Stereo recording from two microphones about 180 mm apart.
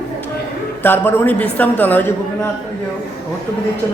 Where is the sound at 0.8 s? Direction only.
10° left (ahead or behind).